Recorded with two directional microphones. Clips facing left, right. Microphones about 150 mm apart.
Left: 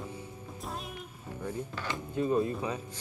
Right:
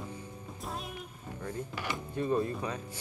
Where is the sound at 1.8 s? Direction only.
10° right (ahead or behind).